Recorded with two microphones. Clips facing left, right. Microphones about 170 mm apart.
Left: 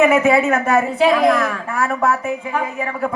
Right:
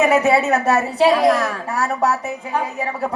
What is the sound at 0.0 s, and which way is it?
A man's voice, 40° right (ahead or behind).